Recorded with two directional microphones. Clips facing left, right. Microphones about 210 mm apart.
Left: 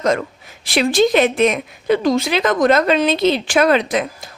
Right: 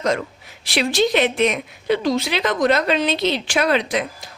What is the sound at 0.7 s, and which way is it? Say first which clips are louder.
A woman's voice: left 4 dB; 50° left (ahead or behind).